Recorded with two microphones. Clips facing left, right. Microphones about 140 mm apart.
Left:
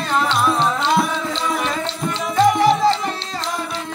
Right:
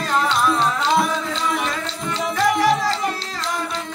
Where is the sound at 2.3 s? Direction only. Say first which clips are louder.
Left 4 dB; 25° left (ahead or behind).